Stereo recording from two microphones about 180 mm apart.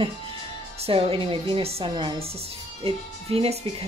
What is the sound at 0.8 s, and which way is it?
A woman's voice, 30° right (ahead or behind).